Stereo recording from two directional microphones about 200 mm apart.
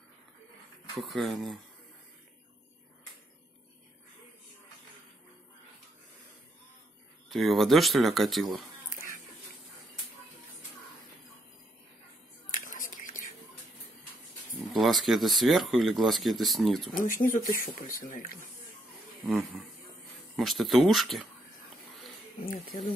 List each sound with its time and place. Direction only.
0.9 s speech: centre (ahead or behind)
7.2 s speech: centre (ahead or behind)
12.6 s whispering: 40° left (ahead or behind)
14.7 s speech: centre (ahead or behind)
16.9 s speech: 40° left (ahead or behind)
19.2 s speech: centre (ahead or behind)